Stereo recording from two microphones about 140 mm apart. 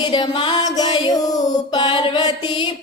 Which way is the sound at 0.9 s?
30° left (ahead or behind).